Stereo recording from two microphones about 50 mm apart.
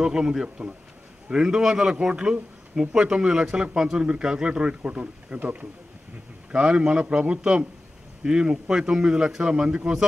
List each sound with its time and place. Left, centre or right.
0.0 s a man's voice: centre